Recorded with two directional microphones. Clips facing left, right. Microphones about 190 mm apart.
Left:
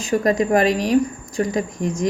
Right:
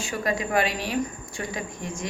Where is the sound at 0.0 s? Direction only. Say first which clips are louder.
Left 9 dB; 40° left (ahead or behind).